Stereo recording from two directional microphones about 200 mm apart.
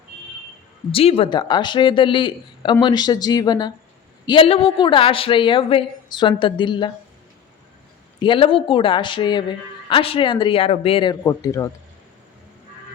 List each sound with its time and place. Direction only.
0.9 s a woman's voice: 30° left (ahead or behind)
8.2 s a woman's voice: 25° left (ahead or behind)